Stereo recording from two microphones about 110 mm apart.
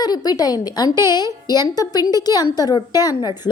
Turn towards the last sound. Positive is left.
turn(degrees=35)  # may be behind; listen again after turning